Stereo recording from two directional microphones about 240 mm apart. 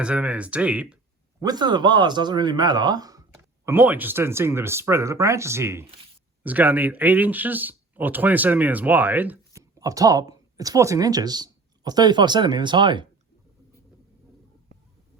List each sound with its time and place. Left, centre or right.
0.0 s speech: centre
1.4 s speech: centre